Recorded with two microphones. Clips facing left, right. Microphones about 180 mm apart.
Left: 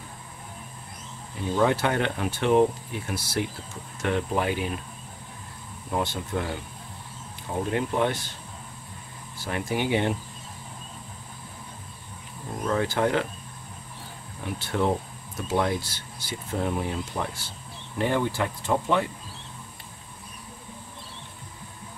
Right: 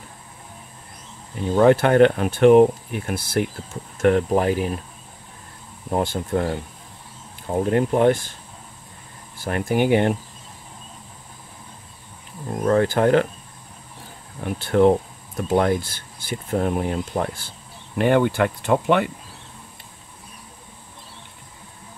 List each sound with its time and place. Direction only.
1.6 s speech: 55° right (ahead or behind)
5.9 s speech: 45° right (ahead or behind)
7.7 s speech: 50° right (ahead or behind)
9.4 s speech: 50° right (ahead or behind)
12.6 s speech: 50° right (ahead or behind)
14.4 s speech: 55° right (ahead or behind)
17.9 s speech: 70° right (ahead or behind)